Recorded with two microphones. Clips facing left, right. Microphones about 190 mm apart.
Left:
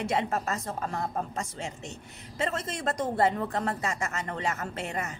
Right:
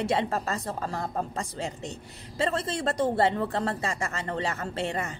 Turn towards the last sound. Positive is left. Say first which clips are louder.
# right 3 dB
turn(degrees=-30)  # may be behind; listen again after turning